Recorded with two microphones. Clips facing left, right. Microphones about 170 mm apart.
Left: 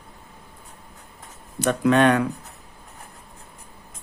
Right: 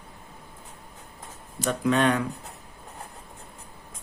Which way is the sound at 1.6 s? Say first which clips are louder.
Left 5 dB; 65° left (ahead or behind).